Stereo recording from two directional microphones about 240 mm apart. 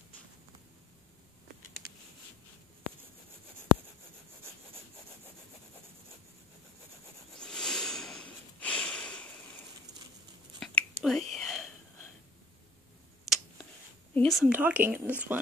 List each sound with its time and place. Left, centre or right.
7.3 s a sound: centre
10.6 s whispering: centre
14.1 s speech: centre